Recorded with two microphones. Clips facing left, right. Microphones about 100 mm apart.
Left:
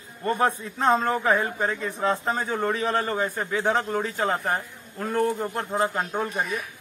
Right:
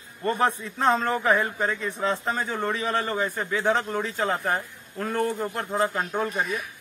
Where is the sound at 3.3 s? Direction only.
20° left (ahead or behind).